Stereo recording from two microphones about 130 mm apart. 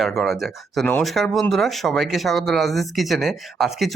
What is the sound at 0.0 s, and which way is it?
Speech, centre (ahead or behind).